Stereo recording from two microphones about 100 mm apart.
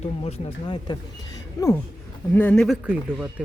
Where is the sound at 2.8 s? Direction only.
15° right (ahead or behind).